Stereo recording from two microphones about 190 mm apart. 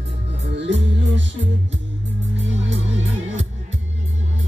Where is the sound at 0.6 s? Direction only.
70° right (ahead or behind).